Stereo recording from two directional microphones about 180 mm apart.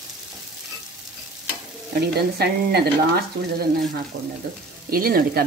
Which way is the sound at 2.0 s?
60° right (ahead or behind).